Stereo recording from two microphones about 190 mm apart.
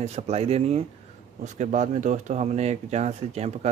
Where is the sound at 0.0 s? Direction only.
35° right (ahead or behind).